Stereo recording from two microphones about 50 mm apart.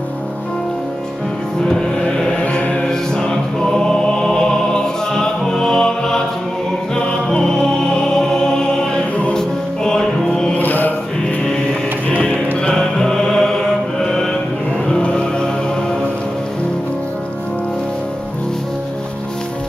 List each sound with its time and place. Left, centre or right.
2.4 s mantra: left
2.9 s music: centre
7.2 s music: centre
10.6 s mantra: left
12.6 s music: centre
13.9 s mantra: centre
14.9 s music: left